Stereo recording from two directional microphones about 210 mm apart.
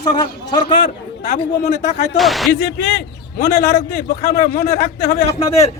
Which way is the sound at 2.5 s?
50° left (ahead or behind).